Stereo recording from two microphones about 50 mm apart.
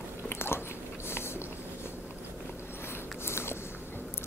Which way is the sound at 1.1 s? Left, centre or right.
Left.